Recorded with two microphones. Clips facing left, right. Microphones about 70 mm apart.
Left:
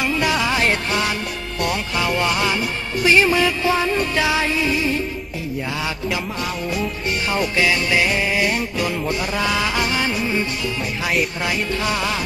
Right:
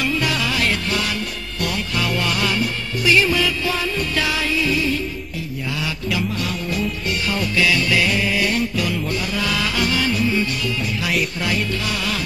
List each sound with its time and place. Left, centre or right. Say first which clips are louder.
0.0 s music: left 2 dB; left
7.2 s music: left 1 dB; left